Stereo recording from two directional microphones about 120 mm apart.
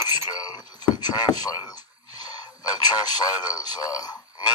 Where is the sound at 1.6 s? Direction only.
35° left (ahead or behind).